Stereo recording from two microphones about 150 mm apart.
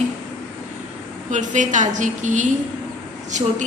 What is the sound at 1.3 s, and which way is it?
A woman's voice, 55° right (ahead or behind).